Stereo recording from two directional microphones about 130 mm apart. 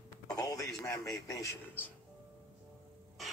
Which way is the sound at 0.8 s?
25° left (ahead or behind).